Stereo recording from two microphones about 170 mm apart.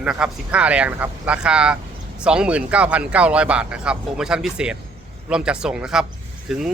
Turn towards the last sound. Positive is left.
turn(degrees=-5)  # may be behind; listen again after turning